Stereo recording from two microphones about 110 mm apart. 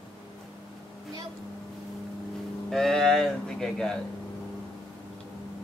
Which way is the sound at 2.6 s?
5° left (ahead or behind).